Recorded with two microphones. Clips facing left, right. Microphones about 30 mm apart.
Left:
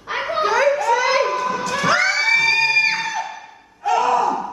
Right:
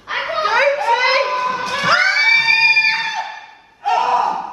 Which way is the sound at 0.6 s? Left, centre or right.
Right.